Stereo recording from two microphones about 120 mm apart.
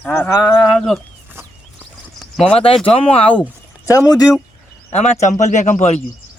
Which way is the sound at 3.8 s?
30° left (ahead or behind).